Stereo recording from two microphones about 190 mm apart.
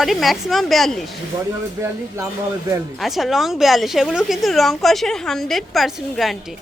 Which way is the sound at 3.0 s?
Centre (ahead or behind).